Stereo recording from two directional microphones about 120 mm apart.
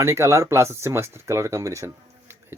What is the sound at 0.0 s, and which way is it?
Speech, 25° right (ahead or behind).